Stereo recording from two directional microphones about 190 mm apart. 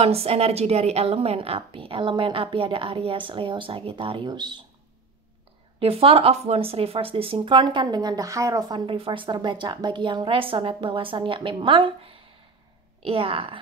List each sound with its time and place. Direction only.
0.0 s speech: 30° right (ahead or behind)
5.8 s speech: 30° right (ahead or behind)